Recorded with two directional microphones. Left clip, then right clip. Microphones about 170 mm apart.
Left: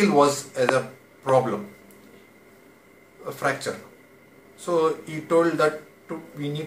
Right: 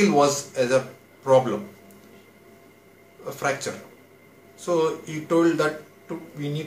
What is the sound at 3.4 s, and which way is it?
Speech, centre (ahead or behind).